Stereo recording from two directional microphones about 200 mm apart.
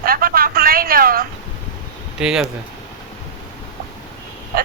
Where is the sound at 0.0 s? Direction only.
45° right (ahead or behind).